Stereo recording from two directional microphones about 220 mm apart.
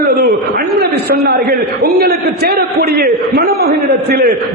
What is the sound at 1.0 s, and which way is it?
A man's voice, 45° right (ahead or behind).